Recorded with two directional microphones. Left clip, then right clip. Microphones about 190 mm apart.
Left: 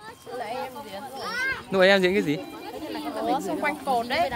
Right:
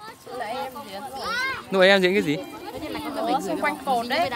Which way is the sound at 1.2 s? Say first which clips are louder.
Right 1 dB; 55° right (ahead or behind).